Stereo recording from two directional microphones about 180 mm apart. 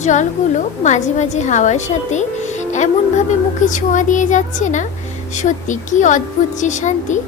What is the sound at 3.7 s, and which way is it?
A woman's voice, 45° left (ahead or behind).